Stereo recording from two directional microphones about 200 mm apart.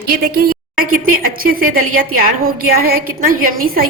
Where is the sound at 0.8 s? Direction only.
45° right (ahead or behind).